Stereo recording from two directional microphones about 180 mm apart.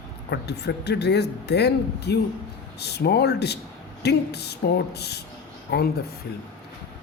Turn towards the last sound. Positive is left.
turn(degrees=65)  # may be behind; listen again after turning